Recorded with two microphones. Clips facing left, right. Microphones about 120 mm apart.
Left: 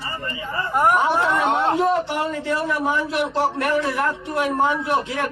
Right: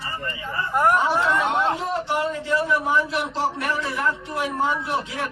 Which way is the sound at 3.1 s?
60° left (ahead or behind).